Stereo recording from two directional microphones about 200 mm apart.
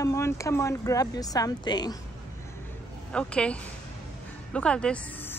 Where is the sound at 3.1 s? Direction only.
5° left (ahead or behind).